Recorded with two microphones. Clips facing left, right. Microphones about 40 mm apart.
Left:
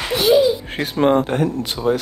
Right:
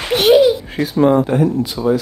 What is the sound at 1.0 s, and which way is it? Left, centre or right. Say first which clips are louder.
Speech: right 3 dB; left.